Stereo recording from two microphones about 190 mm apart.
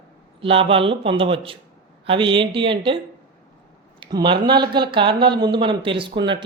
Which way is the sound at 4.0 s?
25° right (ahead or behind).